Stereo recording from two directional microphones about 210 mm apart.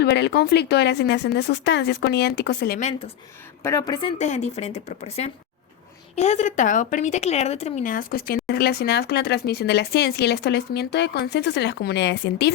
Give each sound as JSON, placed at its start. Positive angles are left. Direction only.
{"t": 0.0, "sound": "speech", "side_deg": 55}
{"t": 3.6, "sound": "speech", "side_deg": 15}
{"t": 4.0, "sound": "speech", "side_deg": 30}